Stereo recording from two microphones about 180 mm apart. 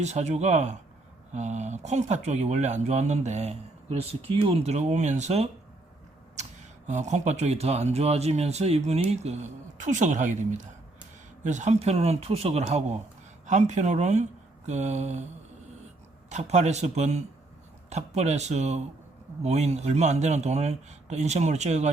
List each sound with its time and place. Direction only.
0.0 s speech: 40° right (ahead or behind)
6.8 s speech: 40° right (ahead or behind)
16.3 s speech: 40° right (ahead or behind)